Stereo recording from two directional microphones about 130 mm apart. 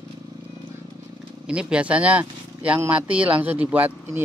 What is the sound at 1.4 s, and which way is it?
Speech, 10° right (ahead or behind).